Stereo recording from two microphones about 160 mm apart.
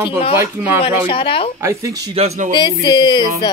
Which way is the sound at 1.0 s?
35° left (ahead or behind).